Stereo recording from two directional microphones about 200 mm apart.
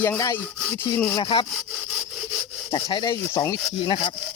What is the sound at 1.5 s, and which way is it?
Sawing, centre (ahead or behind).